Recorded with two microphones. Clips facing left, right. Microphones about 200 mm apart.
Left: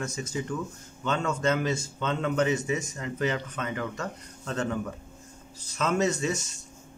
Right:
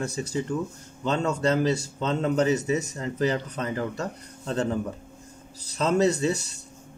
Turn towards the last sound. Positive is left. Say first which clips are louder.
# right 4 dB
turn(degrees=-35)  # may be behind; listen again after turning